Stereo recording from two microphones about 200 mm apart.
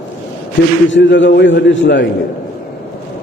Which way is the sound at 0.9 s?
65° left (ahead or behind).